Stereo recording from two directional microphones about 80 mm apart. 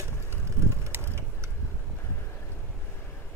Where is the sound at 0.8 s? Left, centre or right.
Right.